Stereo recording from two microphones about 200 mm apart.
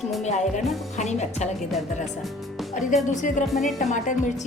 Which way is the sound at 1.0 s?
35° left (ahead or behind).